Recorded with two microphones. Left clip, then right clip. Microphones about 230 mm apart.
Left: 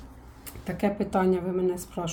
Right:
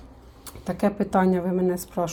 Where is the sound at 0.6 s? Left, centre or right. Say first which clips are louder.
Right 3 dB; centre.